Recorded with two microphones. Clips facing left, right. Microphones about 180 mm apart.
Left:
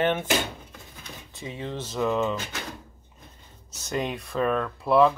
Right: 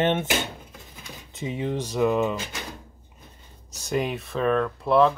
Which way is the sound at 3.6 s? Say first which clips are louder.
Right 3 dB; 10° right (ahead or behind).